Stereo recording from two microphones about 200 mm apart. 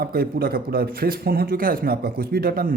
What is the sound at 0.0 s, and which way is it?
Speech, 50° right (ahead or behind).